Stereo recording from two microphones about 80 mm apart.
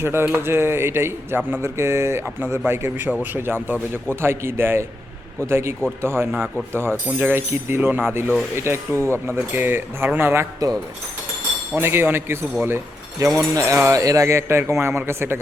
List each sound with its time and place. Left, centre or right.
0.0 s a man's voice: right
1.6 s a man's voice: right
10.6 s speech: right
11.7 s a man's voice: right
13.1 s a man's voice: right